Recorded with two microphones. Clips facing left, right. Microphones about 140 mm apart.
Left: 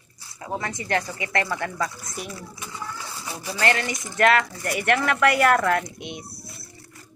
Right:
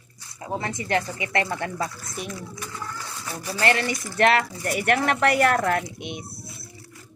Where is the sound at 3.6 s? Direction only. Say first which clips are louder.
Right 1 dB; 30° right (ahead or behind).